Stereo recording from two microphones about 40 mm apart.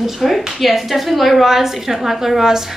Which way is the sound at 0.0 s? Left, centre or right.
Centre.